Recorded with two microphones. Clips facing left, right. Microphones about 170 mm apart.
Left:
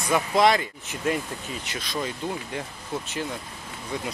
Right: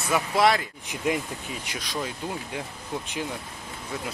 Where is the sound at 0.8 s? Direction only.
15° right (ahead or behind).